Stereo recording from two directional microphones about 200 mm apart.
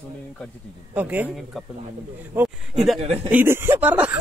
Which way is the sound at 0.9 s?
5° right (ahead or behind).